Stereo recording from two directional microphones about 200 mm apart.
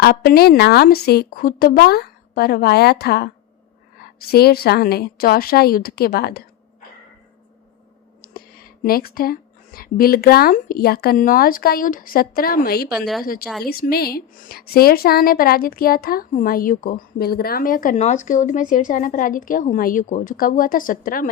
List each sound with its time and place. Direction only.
0.0 s a woman's voice: 50° left (ahead or behind)
8.8 s a woman's voice: 50° left (ahead or behind)
13.0 s speech: centre (ahead or behind)
13.7 s a woman's voice: 50° left (ahead or behind)